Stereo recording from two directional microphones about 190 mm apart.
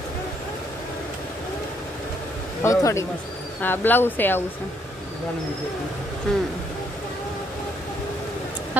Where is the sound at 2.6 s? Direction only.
15° left (ahead or behind).